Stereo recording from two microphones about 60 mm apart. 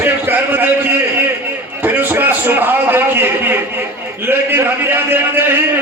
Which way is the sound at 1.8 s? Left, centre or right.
Right.